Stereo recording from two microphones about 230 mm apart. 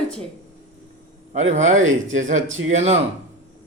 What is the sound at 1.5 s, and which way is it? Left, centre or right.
Speech, right.